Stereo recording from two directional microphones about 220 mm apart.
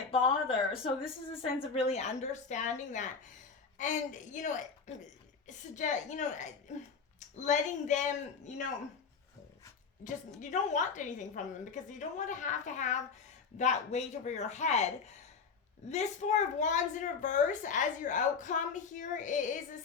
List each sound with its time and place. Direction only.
0.1 s a woman's voice: 25° left (ahead or behind)
10.0 s a woman's voice: 35° left (ahead or behind)